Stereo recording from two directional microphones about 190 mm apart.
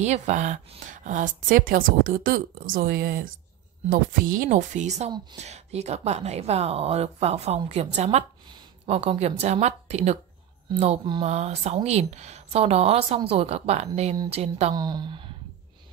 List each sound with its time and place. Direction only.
0.0 s a woman's voice: 40° right (ahead or behind)
14.8 s speech: 20° right (ahead or behind)